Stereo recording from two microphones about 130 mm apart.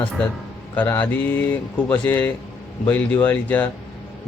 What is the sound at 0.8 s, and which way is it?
Speech, 15° left (ahead or behind).